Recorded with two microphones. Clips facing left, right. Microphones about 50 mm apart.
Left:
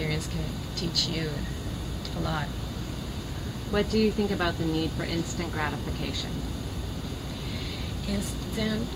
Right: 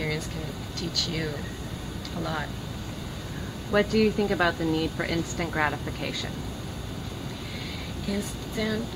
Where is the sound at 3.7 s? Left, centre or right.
Right.